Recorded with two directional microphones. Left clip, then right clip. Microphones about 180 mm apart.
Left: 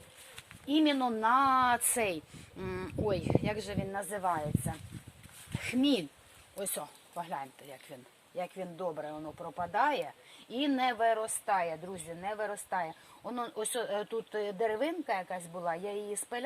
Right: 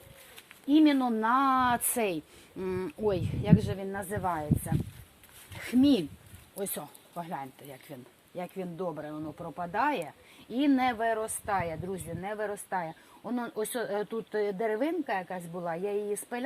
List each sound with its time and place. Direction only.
0.7 s speech: 10° right (ahead or behind)
5.6 s speech: 15° right (ahead or behind)
11.4 s a woman's voice: 25° right (ahead or behind)